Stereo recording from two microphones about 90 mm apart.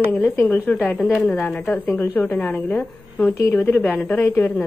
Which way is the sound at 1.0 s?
5° left (ahead or behind).